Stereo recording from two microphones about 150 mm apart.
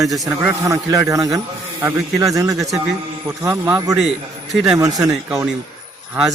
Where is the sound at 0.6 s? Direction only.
20° right (ahead or behind).